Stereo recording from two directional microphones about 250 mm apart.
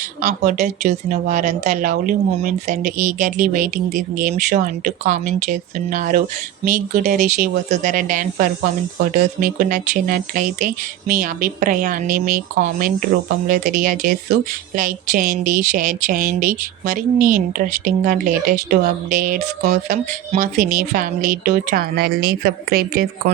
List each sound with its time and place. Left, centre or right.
0.2 s a woman's voice: right